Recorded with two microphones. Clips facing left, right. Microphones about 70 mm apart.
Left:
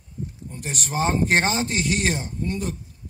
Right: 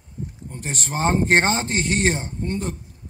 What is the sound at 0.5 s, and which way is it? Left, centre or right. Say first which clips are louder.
A man's voice: right 1 dB; right.